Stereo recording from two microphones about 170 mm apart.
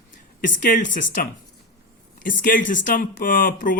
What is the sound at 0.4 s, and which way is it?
Speech, 50° left (ahead or behind).